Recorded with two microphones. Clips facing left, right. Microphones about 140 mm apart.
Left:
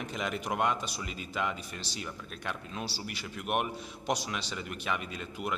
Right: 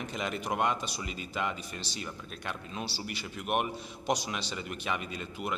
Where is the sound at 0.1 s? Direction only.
Centre (ahead or behind).